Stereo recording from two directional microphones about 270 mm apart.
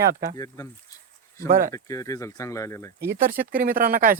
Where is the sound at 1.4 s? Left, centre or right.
Right.